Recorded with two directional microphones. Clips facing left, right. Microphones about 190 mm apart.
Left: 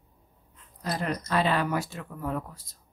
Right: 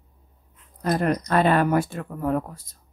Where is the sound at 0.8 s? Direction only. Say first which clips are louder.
Right 8 dB; 50° right (ahead or behind).